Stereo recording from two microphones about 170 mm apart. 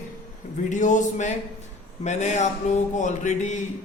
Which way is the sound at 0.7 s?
45° left (ahead or behind).